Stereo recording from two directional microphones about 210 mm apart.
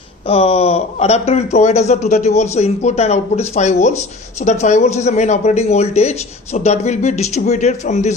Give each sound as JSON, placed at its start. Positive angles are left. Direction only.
{"t": 0.3, "sound": "speech", "side_deg": 30}